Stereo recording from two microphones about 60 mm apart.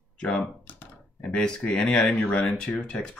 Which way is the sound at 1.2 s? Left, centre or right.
Centre.